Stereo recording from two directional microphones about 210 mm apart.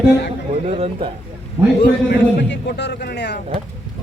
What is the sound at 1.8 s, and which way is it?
A man's voice, 50° left (ahead or behind).